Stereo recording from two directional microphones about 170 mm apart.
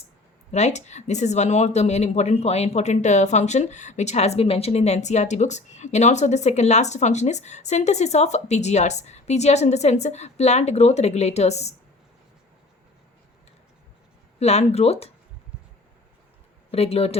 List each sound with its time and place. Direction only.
0.5 s speech: 40° left (ahead or behind)
14.3 s speech: 40° left (ahead or behind)
16.7 s speech: 35° left (ahead or behind)